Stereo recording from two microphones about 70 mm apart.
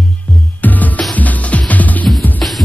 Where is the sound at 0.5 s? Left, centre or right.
Left.